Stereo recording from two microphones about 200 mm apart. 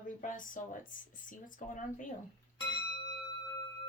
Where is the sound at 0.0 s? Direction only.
40° left (ahead or behind).